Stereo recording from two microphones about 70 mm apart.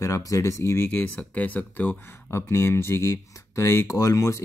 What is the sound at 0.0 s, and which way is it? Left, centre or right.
Speech, left.